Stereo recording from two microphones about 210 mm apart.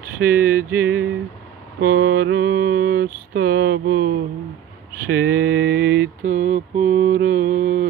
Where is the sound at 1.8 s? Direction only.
45° right (ahead or behind).